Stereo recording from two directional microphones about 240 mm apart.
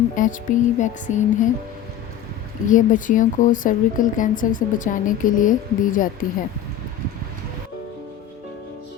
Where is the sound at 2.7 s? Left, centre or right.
Left.